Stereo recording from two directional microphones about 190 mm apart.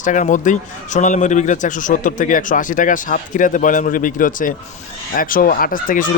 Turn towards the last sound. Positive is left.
turn(degrees=45)  # may be behind; listen again after turning